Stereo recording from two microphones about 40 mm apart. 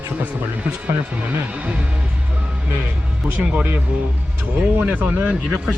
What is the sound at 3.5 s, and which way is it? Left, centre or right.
Speech, right.